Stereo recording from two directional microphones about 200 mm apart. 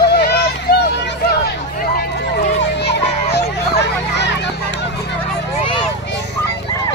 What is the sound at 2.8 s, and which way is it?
Children playing, 55° left (ahead or behind).